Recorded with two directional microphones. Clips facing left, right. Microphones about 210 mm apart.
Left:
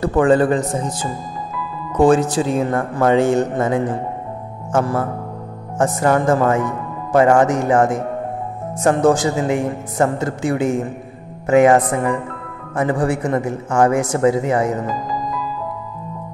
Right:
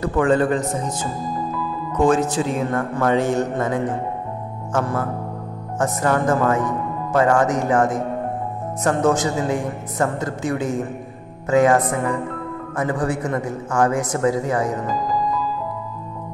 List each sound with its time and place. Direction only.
0.0 s a man's voice: 30° left (ahead or behind)
5.8 s a man's voice: 25° left (ahead or behind)